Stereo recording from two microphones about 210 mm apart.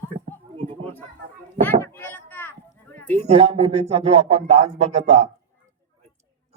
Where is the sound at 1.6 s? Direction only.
10° left (ahead or behind).